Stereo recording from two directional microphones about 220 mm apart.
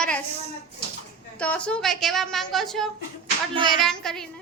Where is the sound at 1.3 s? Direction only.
5° left (ahead or behind).